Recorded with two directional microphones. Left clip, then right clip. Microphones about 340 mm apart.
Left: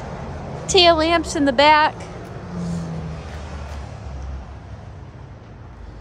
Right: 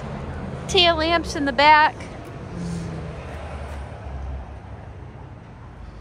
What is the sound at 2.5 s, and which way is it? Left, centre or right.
Vehicle, centre.